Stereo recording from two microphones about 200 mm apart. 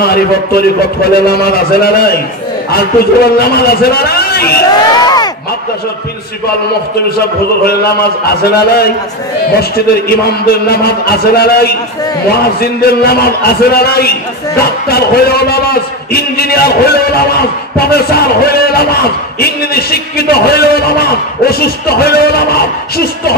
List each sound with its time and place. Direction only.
0.0 s a man's voice: 50° left (ahead or behind)
5.0 s a sound: 20° left (ahead or behind)
7.1 s a man's voice: 50° left (ahead or behind)